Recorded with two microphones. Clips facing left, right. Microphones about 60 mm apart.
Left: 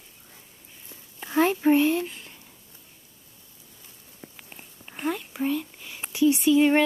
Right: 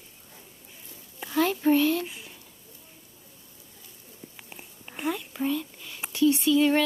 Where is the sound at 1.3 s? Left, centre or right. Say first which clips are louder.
Left 2 dB; left.